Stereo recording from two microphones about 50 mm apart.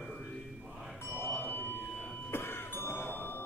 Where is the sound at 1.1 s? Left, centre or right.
Left.